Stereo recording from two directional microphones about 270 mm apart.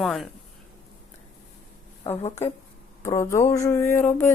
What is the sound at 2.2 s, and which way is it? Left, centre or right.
Speech, left.